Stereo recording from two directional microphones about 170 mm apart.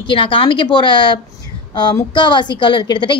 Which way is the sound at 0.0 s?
30° left (ahead or behind).